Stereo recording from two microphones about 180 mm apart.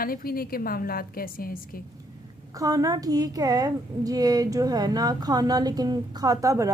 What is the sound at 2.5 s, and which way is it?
A woman's voice, 20° right (ahead or behind).